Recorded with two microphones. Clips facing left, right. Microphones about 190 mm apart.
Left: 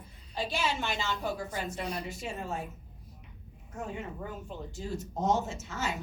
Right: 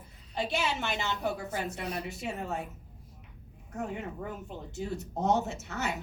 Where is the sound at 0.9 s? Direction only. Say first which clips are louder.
Right 1 dB; 60° right (ahead or behind).